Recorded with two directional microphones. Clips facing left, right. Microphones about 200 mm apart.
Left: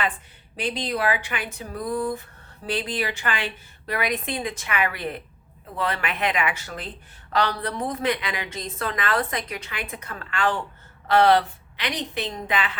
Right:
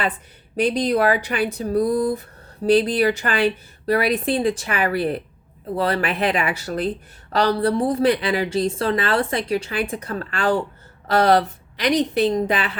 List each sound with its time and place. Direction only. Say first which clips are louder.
0.5 s a woman's voice: right 9 dB; 45° right (ahead or behind)